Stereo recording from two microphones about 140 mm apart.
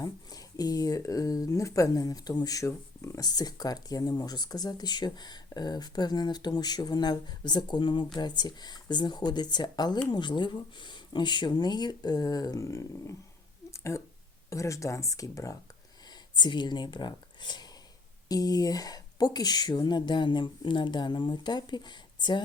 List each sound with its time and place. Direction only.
0.0 s speech: 25° left (ahead or behind)
13.7 s a sound: 20° left (ahead or behind)
14.5 s speech: 20° left (ahead or behind)